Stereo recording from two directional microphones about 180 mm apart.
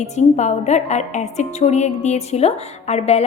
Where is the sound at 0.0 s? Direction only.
40° left (ahead or behind).